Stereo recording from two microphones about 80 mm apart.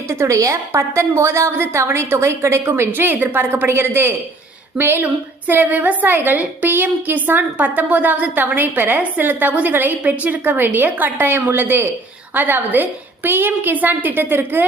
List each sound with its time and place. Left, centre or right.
0.1 s a woman's voice: right